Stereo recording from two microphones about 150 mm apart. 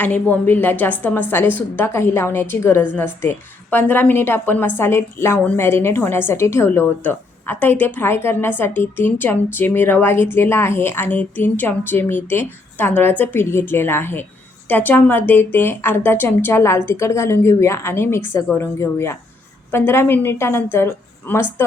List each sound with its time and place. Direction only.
0.0 s a woman's voice: 10° left (ahead or behind)